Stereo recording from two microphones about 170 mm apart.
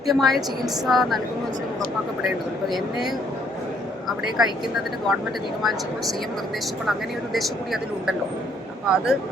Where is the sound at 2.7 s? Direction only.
Centre (ahead or behind).